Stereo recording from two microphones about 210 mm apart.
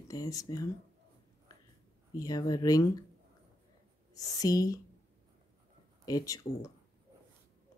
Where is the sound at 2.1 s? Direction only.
15° left (ahead or behind).